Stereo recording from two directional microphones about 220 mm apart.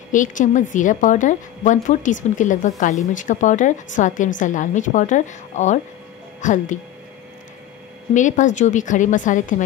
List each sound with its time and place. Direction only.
0.1 s a woman's voice: 35° left (ahead or behind)
8.1 s a woman's voice: 35° left (ahead or behind)